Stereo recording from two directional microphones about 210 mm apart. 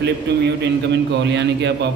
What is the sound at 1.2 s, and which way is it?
Speech, 55° right (ahead or behind).